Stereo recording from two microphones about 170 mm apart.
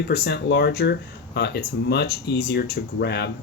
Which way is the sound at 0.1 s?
75° left (ahead or behind).